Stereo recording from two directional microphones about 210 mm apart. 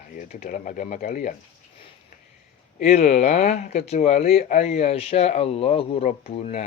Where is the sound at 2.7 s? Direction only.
30° left (ahead or behind).